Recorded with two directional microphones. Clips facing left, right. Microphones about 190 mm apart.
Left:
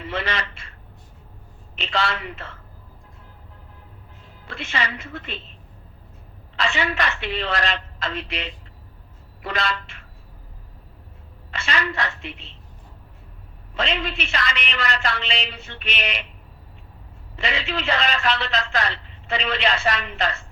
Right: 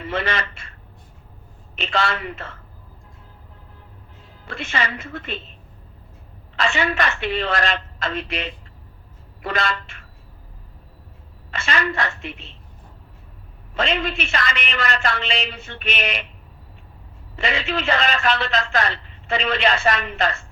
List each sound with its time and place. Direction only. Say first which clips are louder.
0.0 s a man's voice: right 3 dB; 50° right (ahead or behind)
1.7 s a man's voice: right 2 dB; 50° right (ahead or behind)
4.4 s a man's voice: right 2 dB; 50° right (ahead or behind)
6.6 s a man's voice: right 2 dB; 50° right (ahead or behind)
11.5 s a man's voice: right 2 dB; 50° right (ahead or behind)
13.7 s a man's voice: right 3 dB; 50° right (ahead or behind)
17.3 s a man's voice: right 3 dB; 50° right (ahead or behind)